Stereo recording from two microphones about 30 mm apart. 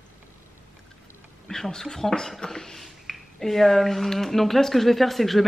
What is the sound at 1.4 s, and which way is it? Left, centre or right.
Speech, centre.